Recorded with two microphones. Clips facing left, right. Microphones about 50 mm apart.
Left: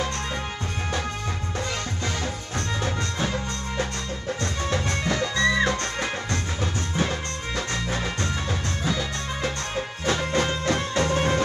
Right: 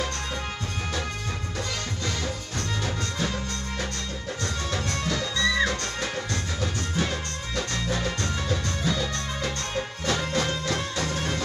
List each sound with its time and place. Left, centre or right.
2.8 s music: left